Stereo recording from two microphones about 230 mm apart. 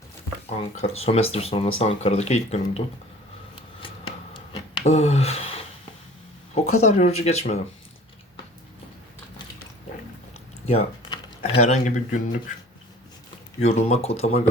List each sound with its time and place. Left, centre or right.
0.8 s speech: left
3.8 s a sound: left
6.5 s speech: left
10.7 s speech: left
13.6 s speech: left